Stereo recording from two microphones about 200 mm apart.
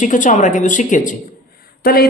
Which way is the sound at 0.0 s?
40° left (ahead or behind).